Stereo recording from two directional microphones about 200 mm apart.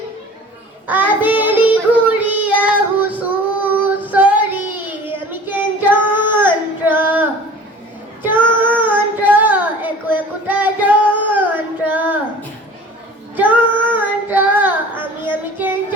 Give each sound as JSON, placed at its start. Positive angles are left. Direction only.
{"t": 0.9, "sound": "child singing", "side_deg": -10}
{"t": 8.5, "sound": "child singing", "side_deg": -10}
{"t": 13.3, "sound": "child singing", "side_deg": -10}